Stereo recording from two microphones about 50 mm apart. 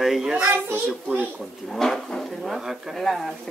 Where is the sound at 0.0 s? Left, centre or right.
Centre.